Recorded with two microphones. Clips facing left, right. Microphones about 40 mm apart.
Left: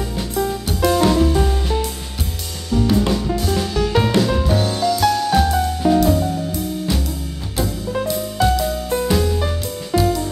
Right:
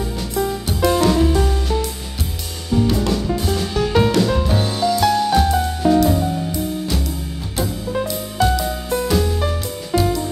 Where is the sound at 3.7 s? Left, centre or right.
Centre.